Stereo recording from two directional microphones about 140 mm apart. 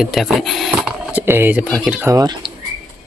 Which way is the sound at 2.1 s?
25° right (ahead or behind).